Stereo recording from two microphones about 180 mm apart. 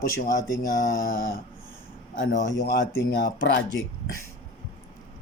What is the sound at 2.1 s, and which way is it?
Speech, 85° left.